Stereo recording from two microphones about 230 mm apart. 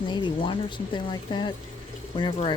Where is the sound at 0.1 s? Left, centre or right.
Centre.